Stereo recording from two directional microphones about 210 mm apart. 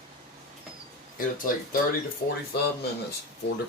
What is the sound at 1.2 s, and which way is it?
Speech, 40° left (ahead or behind).